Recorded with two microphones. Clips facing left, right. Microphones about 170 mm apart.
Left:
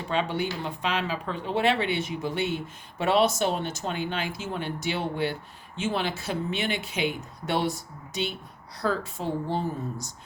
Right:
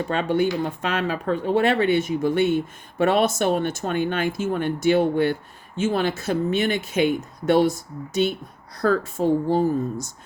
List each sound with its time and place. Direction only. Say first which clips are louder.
0.1 s speech: right 5 dB; 50° right (ahead or behind)